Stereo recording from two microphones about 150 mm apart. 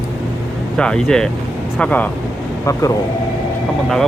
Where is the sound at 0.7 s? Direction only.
5° left (ahead or behind).